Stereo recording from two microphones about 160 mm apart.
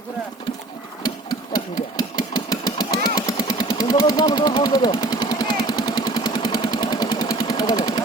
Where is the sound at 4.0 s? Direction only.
25° left (ahead or behind).